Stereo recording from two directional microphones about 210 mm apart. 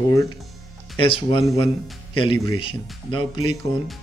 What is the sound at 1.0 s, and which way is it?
Speech, 25° left (ahead or behind).